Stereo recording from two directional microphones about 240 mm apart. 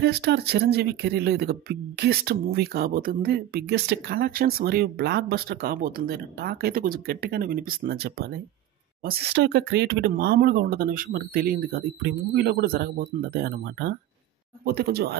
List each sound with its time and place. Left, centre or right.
0.0 s speech: right